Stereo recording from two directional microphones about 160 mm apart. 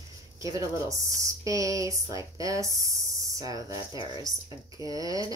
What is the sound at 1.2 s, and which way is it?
Speech, 20° right (ahead or behind).